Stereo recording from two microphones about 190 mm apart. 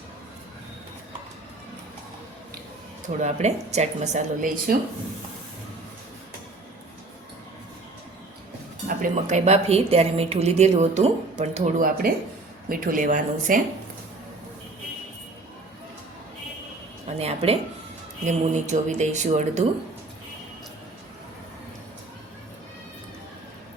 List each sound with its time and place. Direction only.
3.2 s a woman's voice: 40° right (ahead or behind)
8.9 s a woman's voice: 45° right (ahead or behind)
17.1 s a woman's voice: 30° right (ahead or behind)